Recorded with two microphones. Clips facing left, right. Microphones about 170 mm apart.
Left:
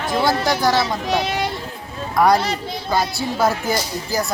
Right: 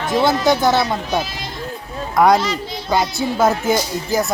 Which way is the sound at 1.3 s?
65° left (ahead or behind).